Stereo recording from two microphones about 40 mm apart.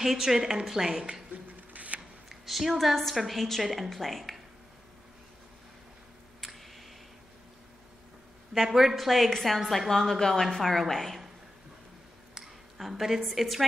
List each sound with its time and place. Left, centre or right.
0.0 s a woman's voice: centre
1.7 s shuffling cards: right
2.2 s a woman's voice: centre
6.4 s a sound: centre
8.5 s a woman's voice: centre
12.4 s a woman's voice: centre